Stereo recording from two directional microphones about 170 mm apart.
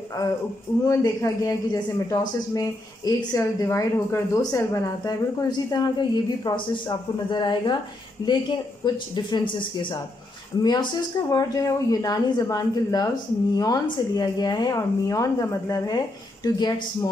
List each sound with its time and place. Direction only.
0.8 s speech: 20° left (ahead or behind)